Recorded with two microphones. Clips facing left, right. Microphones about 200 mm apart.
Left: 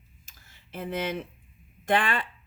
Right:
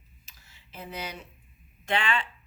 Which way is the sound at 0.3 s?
50° left (ahead or behind).